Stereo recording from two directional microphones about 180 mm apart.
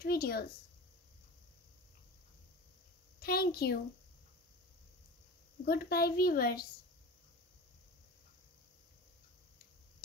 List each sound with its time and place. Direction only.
0.0 s a sound: 60° left (ahead or behind)
3.2 s a woman's voice: 60° left (ahead or behind)
5.7 s a woman's voice: 60° left (ahead or behind)